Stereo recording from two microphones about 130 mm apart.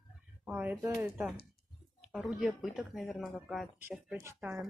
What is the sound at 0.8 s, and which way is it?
Speech, 20° right (ahead or behind).